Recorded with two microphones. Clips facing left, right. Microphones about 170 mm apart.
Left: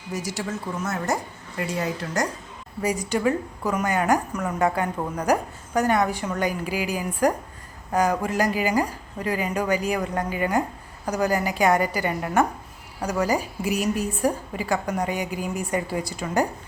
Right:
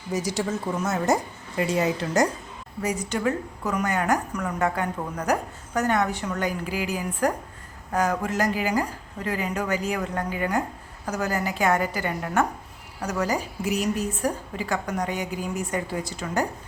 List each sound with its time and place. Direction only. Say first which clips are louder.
0.1 s a woman's voice: right 3 dB; 20° right (ahead or behind)
2.8 s a woman's voice: left 3 dB; 10° left (ahead or behind)